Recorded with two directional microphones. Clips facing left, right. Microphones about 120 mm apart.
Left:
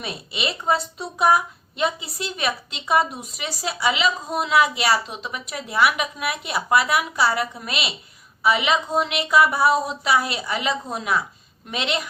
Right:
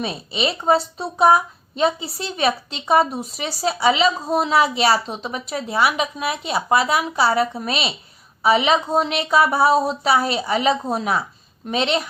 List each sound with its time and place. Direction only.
0.0 s a woman's voice: 25° right (ahead or behind)